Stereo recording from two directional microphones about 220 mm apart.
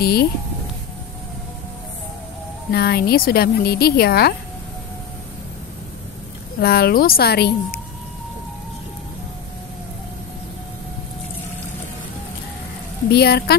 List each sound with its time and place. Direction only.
0.0 s speech: 45° left (ahead or behind)
2.7 s speech: 45° left (ahead or behind)
6.6 s speech: 45° left (ahead or behind)
13.1 s speech: 45° left (ahead or behind)